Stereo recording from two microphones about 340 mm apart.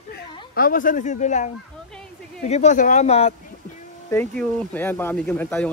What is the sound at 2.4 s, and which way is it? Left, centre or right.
Speech, centre.